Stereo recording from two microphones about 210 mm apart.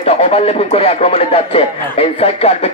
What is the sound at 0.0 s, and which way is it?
Speech, 30° left (ahead or behind).